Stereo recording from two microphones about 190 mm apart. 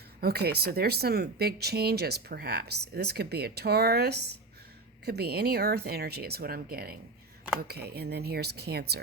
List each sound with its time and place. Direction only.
0.2 s speech: 55° right (ahead or behind)